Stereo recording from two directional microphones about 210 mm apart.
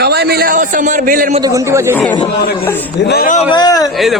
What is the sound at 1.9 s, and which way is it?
Speech, 10° left (ahead or behind).